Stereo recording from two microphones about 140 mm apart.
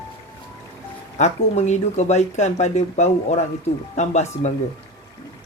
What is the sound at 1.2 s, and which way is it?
Speech, 55° left (ahead or behind).